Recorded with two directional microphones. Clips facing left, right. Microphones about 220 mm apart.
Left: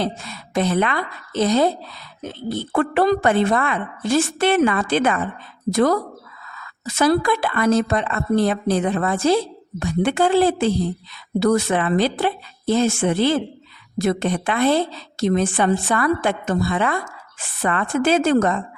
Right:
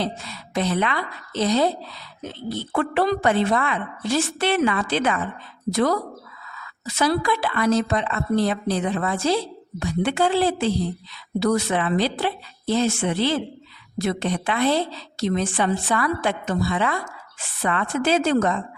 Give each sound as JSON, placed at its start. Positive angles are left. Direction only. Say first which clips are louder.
{"t": 0.0, "sound": "a woman's voice", "louder": "left 3 dB", "side_deg": 50}